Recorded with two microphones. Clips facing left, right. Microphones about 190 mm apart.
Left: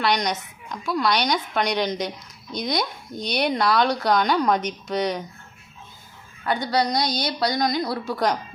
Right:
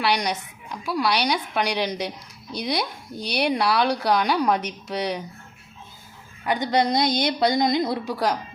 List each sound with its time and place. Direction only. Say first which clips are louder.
0.0 s speech: left 1 dB; 10° right (ahead or behind)
6.4 s a woman's voice: right 1 dB; 15° right (ahead or behind)
8.1 s speech: left 3 dB; 5° right (ahead or behind)